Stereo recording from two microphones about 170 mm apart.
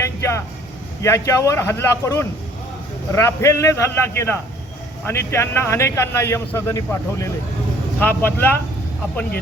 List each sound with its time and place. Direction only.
0.0 s vehicle: 15° left (ahead or behind)
1.0 s a man's voice: 20° left (ahead or behind)